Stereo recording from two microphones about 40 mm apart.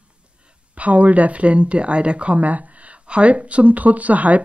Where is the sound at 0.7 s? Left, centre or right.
Right.